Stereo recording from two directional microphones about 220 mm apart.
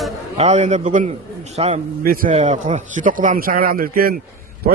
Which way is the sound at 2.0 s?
40° right (ahead or behind).